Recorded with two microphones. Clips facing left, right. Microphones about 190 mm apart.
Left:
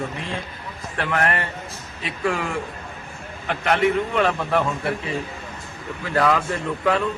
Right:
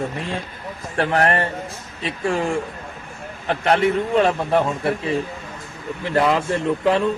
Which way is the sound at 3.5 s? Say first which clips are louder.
Right 2 dB; 35° right (ahead or behind).